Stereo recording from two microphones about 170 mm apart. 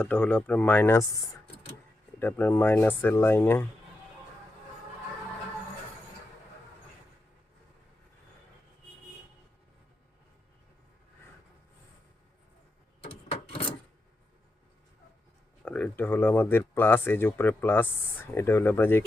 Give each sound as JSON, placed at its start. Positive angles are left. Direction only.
{"t": 0.0, "sound": "speech", "side_deg": 10}
{"t": 2.1, "sound": "speech", "side_deg": 10}
{"t": 13.0, "sound": "rub", "side_deg": 35}
{"t": 15.6, "sound": "speech", "side_deg": 5}